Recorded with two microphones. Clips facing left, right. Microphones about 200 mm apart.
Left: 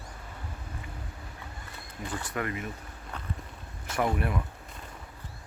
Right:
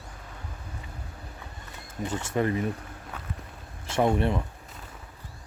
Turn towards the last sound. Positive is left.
turn(degrees=-25)  # may be behind; listen again after turning